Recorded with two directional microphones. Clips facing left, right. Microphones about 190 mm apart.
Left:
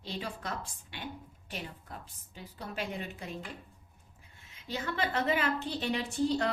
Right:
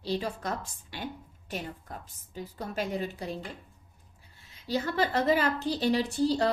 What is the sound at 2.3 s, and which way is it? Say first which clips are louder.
A woman's voice: right 6 dB; 40° right (ahead or behind).